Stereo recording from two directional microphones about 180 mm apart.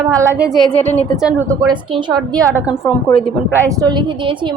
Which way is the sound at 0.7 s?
10° left (ahead or behind).